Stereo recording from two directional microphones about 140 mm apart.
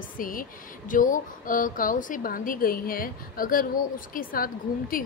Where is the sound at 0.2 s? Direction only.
80° left.